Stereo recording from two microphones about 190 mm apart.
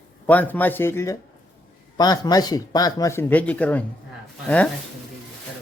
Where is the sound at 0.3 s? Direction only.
10° left (ahead or behind).